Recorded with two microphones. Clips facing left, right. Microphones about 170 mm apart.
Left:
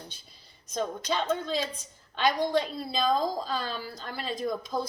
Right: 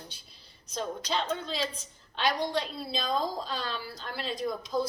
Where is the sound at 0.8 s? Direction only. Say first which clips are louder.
Left 2 dB; 50° left (ahead or behind).